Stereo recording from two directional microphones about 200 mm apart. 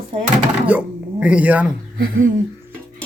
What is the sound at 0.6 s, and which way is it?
Speech, 5° right (ahead or behind).